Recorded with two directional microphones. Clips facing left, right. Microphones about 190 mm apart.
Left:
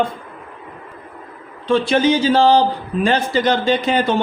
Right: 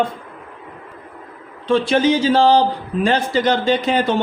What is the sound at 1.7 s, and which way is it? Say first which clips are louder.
Speech: even; 35° right (ahead or behind).